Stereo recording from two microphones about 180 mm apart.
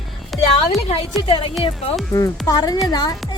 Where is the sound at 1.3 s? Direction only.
30° left (ahead or behind).